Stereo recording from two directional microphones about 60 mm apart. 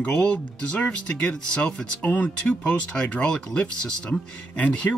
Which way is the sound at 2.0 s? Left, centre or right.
Left.